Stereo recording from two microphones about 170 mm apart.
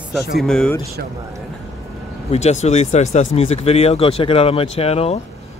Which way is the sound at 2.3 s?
40° left (ahead or behind).